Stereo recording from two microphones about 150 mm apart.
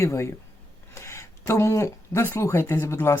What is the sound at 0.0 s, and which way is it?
Speech, 20° left (ahead or behind).